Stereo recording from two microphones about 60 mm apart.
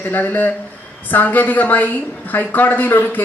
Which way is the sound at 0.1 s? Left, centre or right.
Left.